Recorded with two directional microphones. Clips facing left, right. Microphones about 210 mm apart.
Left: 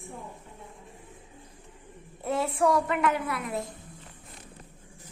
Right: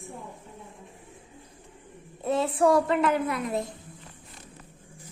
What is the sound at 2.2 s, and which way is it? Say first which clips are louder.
Speech: right 3 dB; 20° right (ahead or behind).